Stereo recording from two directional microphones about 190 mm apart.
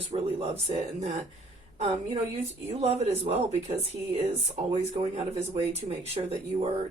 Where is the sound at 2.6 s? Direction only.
35° right (ahead or behind).